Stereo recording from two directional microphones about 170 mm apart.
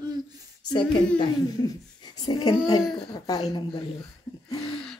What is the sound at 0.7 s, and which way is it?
Speech, 25° left (ahead or behind).